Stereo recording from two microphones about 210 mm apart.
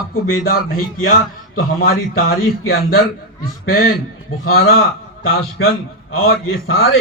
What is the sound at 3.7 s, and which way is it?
Speech, 45° left (ahead or behind).